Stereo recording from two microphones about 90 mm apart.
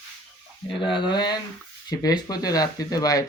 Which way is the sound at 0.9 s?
55° left (ahead or behind).